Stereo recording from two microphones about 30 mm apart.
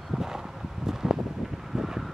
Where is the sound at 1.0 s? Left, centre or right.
Centre.